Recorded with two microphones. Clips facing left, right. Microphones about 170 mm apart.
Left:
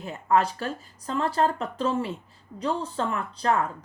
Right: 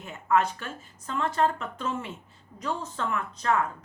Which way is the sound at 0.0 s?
35° left (ahead or behind).